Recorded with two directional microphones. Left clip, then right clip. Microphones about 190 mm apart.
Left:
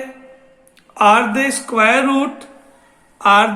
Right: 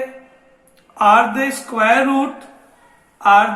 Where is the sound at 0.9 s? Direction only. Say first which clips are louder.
Even; 55° left (ahead or behind).